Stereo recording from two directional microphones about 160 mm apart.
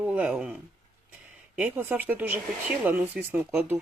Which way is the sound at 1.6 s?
10° right (ahead or behind).